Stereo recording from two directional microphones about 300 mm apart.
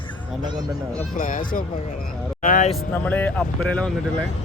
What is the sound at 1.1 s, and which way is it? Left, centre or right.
Speech, left.